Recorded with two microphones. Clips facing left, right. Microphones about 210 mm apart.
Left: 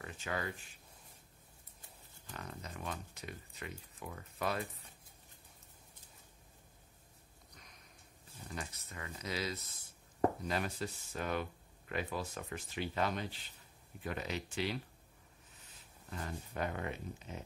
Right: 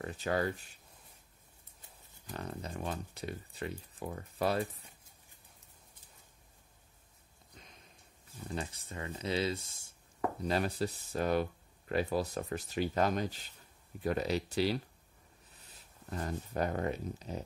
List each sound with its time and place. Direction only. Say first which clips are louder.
0.0 s a sound: right 8 dB; 35° right (ahead or behind)
2.2 s speech: right 6 dB; 35° right (ahead or behind)
8.5 s speech: right 6 dB; 30° right (ahead or behind)
16.1 s speech: right 6 dB; 40° right (ahead or behind)